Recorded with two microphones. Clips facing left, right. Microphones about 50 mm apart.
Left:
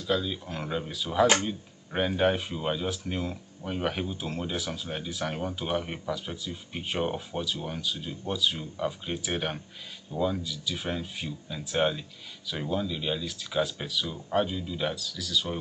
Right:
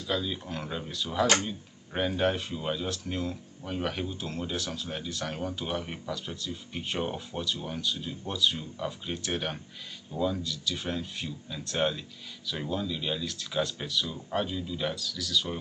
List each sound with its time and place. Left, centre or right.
0.0 s speech: centre